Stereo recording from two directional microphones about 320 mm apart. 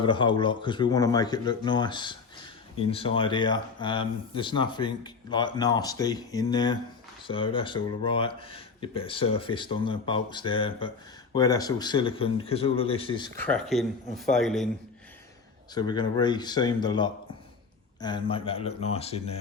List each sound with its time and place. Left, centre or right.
0.0 s speech: centre
13.5 s speech: centre
15.7 s speech: centre